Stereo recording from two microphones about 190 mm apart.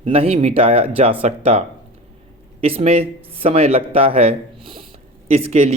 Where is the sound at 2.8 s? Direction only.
30° right (ahead or behind).